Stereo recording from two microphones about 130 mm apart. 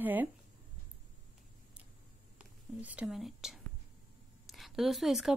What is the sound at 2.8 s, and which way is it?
Speech, 10° right (ahead or behind).